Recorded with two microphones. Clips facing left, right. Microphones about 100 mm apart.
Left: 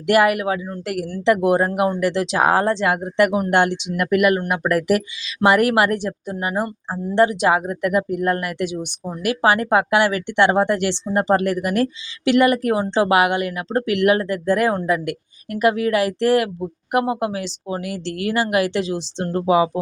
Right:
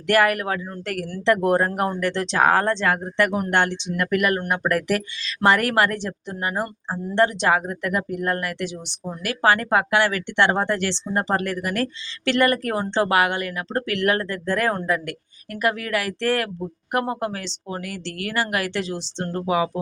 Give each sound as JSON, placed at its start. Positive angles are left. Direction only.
{"t": 0.1, "sound": "speech", "side_deg": 15}